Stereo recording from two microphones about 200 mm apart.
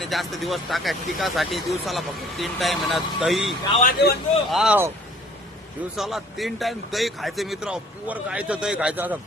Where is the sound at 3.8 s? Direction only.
50° left (ahead or behind).